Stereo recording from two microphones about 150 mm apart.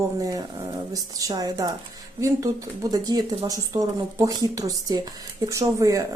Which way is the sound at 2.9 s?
25° right (ahead or behind).